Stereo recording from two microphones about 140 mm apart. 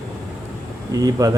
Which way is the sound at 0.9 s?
25° right (ahead or behind).